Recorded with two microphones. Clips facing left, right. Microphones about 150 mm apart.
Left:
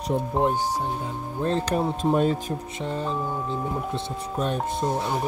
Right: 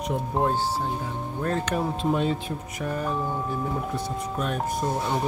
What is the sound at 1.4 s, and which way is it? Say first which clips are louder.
Speech: left 3 dB; 25° left (ahead or behind).